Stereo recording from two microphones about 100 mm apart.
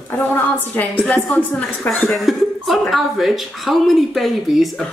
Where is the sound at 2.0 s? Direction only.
Centre (ahead or behind).